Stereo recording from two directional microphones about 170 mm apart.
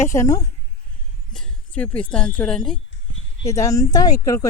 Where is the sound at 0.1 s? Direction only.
20° left (ahead or behind).